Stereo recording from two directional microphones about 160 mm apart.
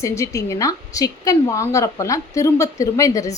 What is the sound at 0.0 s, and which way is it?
A woman's voice, 20° left (ahead or behind).